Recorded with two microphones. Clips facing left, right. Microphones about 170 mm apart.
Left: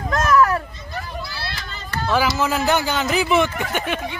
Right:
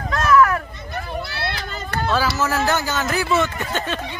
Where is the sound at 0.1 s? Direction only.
40° left (ahead or behind).